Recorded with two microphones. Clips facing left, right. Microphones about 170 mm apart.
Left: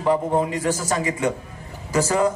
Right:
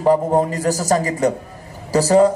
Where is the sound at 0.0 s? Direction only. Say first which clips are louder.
Right 5 dB; 40° right (ahead or behind).